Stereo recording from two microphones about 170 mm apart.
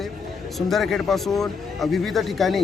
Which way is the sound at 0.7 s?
Centre (ahead or behind).